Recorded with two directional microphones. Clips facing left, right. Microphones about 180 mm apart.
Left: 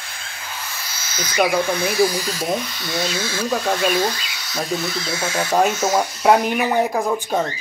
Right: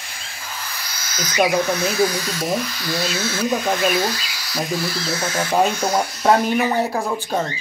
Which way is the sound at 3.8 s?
10° right (ahead or behind).